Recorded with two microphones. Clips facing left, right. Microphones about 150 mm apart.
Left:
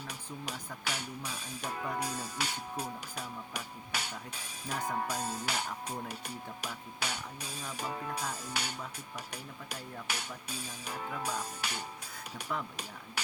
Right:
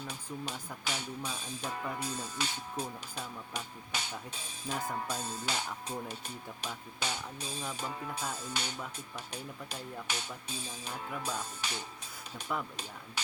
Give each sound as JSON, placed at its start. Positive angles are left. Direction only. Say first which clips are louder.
{"t": 0.1, "sound": "speech", "louder": "right 2 dB", "side_deg": 10}